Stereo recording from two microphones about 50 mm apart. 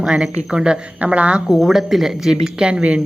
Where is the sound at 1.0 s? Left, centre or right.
Right.